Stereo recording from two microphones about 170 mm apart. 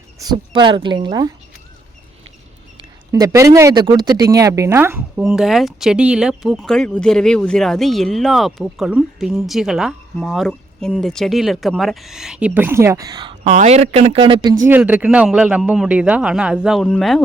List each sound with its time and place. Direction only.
0.2 s speech: 25° right (ahead or behind)
3.1 s speech: 20° right (ahead or behind)
14.7 s speech: 10° right (ahead or behind)